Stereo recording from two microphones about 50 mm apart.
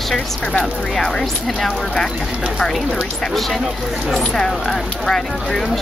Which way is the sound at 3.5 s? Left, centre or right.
Centre.